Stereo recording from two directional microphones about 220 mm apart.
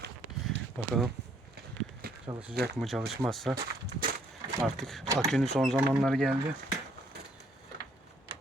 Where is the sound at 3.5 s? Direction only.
45° right (ahead or behind).